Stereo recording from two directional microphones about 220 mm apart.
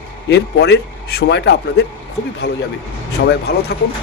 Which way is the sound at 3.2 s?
50° left (ahead or behind).